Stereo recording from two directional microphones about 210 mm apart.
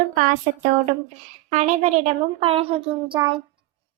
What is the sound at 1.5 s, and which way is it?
Speech, 35° right (ahead or behind).